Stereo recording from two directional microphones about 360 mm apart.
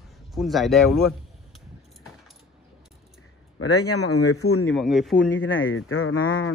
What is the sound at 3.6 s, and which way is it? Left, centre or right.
Speech, left.